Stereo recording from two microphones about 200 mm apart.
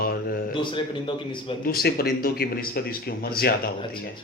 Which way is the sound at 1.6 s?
50° left (ahead or behind).